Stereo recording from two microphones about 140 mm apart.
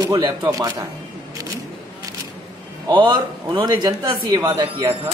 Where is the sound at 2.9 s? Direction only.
30° right (ahead or behind).